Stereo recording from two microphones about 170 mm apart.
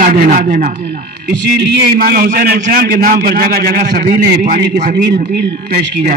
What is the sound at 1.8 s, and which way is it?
A man's voice, 60° right (ahead or behind).